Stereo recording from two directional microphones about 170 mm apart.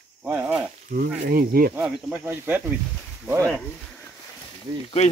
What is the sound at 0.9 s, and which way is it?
Speech, 60° right (ahead or behind).